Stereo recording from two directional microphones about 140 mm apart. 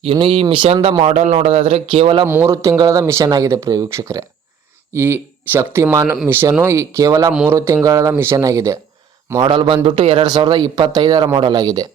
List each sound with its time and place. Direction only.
0.0 s speech: 40° right (ahead or behind)
1.0 s speech: 55° right (ahead or behind)
2.2 s speech: 20° right (ahead or behind); by 10.2 s 45° right (ahead or behind)
10.2 s speech: 30° right (ahead or behind)